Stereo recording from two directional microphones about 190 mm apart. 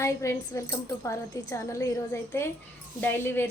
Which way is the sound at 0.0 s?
15° left (ahead or behind).